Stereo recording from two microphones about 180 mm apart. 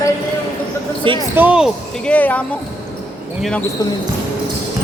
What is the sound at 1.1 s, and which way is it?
Speech, 30° right (ahead or behind).